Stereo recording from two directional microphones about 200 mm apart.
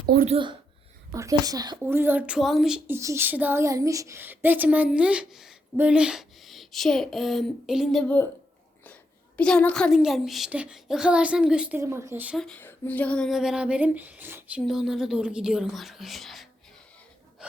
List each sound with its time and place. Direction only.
0.3 s speech: 25° right (ahead or behind); by 8.3 s 5° left (ahead or behind)
9.4 s speech: 5° left (ahead or behind)